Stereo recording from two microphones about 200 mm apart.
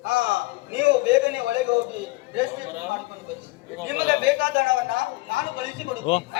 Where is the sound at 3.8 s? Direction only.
60° right (ahead or behind).